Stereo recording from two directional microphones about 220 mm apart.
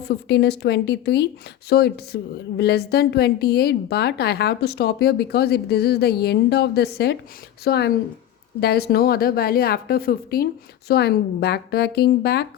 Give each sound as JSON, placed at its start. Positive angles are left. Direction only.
{"t": 0.0, "sound": "a woman's voice", "side_deg": 50}